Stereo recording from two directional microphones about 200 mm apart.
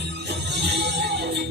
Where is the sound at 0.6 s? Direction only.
55° right (ahead or behind).